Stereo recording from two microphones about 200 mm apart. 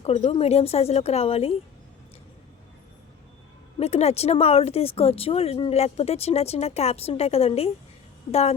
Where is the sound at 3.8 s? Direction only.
30° left (ahead or behind).